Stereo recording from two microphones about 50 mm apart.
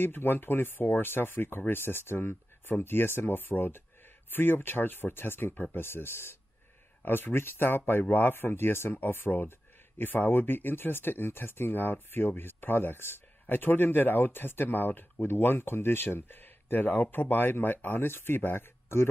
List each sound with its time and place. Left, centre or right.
0.0 s speech: left
5.9 s speech: left